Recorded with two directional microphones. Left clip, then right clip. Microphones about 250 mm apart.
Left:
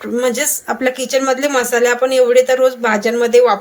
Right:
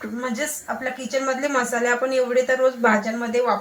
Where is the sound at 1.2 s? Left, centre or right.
Left.